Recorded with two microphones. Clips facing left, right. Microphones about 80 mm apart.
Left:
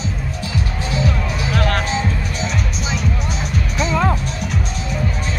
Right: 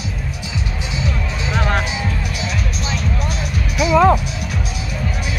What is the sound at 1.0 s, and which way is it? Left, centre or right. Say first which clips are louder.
Music: left 2 dB; right.